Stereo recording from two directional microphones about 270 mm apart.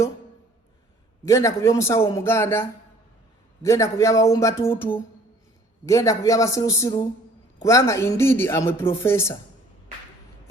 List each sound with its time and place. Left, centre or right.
1.2 s speech: centre